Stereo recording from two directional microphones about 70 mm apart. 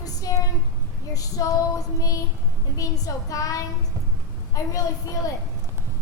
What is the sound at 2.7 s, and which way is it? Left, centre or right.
Child singing, left.